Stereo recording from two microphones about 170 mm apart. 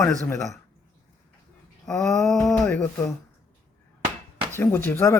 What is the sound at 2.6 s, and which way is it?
Speech, 10° left (ahead or behind).